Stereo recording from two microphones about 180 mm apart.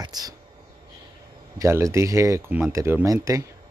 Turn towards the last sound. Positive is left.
turn(degrees=-20)  # may be behind; listen again after turning